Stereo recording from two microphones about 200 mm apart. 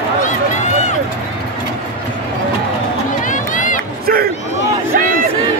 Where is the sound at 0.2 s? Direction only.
35° left (ahead or behind).